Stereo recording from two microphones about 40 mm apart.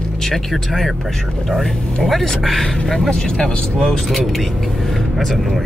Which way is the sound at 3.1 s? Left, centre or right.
Centre.